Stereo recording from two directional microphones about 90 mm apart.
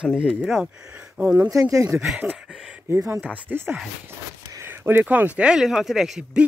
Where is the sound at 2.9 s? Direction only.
30° right (ahead or behind).